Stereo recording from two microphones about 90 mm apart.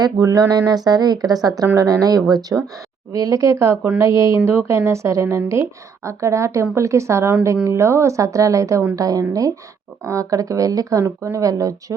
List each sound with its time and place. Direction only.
0.2 s a woman's voice: 35° right (ahead or behind)